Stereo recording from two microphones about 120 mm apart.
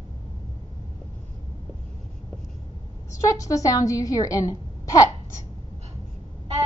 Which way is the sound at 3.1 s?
25° left (ahead or behind).